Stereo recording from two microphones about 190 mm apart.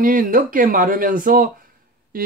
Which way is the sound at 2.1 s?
50° right (ahead or behind).